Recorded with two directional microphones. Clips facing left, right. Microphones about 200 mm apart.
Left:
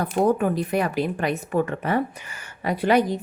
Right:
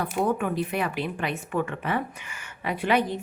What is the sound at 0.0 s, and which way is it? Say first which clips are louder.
A woman's voice: left 5 dB; 40° left (ahead or behind).